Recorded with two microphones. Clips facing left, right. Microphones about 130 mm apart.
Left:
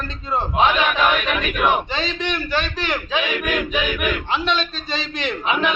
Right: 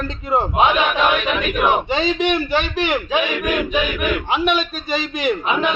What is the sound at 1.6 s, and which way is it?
A man's voice, 20° right (ahead or behind).